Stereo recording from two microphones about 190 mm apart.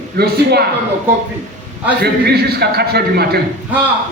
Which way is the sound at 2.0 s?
55° right (ahead or behind).